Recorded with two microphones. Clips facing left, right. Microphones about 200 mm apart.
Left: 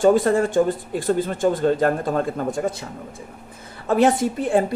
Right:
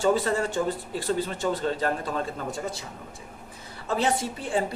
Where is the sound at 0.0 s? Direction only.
50° left (ahead or behind).